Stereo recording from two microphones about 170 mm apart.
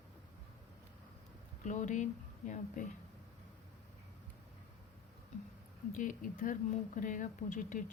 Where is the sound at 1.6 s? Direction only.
45° left (ahead or behind).